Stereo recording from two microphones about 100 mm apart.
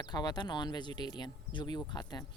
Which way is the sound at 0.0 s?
40° left (ahead or behind).